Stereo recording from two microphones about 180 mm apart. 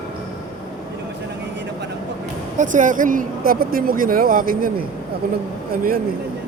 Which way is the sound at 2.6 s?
45° right (ahead or behind).